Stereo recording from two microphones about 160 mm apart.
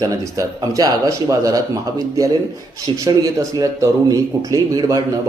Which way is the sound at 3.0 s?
20° right (ahead or behind).